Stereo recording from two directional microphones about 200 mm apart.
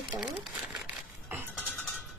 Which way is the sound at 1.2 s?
10° right (ahead or behind).